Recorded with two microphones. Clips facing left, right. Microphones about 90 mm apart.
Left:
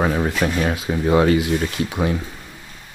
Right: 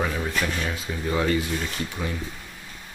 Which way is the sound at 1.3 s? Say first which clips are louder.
Left 7 dB; 70° left (ahead or behind).